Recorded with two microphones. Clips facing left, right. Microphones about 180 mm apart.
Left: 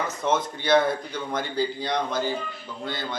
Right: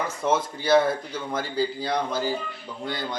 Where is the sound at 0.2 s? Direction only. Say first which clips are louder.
Right 1 dB; 10° right (ahead or behind).